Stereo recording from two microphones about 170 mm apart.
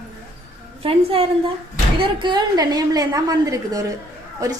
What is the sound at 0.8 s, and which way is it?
A woman's voice, 35° right (ahead or behind).